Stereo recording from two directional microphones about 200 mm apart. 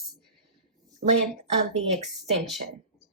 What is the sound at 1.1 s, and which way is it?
Speech, 35° right (ahead or behind).